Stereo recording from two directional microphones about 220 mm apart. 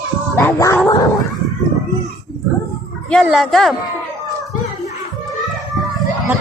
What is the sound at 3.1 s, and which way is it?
Speech, centre (ahead or behind).